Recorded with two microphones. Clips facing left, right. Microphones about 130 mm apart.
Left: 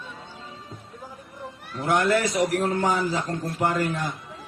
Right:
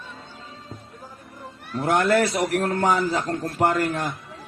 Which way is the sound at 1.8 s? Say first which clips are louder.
Right 2 dB; 50° right (ahead or behind).